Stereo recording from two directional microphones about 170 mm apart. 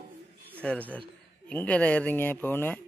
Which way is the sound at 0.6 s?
10° left (ahead or behind).